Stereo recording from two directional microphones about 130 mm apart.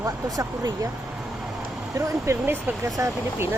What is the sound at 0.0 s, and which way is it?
Speech, 25° right (ahead or behind).